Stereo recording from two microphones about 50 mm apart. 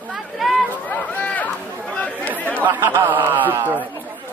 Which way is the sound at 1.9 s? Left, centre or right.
Left.